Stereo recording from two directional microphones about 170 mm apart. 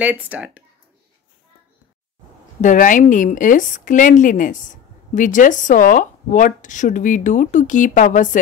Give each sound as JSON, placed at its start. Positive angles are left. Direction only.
{"t": 0.0, "sound": "speech", "side_deg": -10}
{"t": 2.6, "sound": "speech", "side_deg": 50}